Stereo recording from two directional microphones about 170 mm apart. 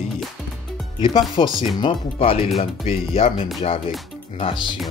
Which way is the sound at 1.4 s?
30° left (ahead or behind).